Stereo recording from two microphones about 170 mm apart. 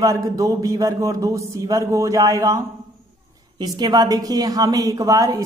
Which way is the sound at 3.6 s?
20° right (ahead or behind).